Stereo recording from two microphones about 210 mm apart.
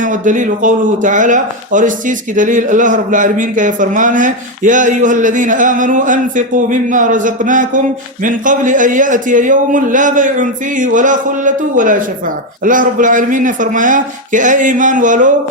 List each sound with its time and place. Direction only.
0.0 s a man's voice: 40° right (ahead or behind)